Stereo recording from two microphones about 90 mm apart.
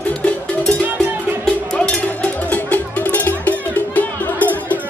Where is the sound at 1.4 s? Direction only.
10° left (ahead or behind).